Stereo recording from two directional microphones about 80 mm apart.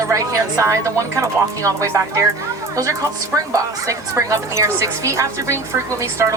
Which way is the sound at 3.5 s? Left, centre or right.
Right.